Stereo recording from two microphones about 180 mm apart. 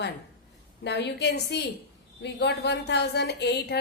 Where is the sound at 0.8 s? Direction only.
70° left (ahead or behind).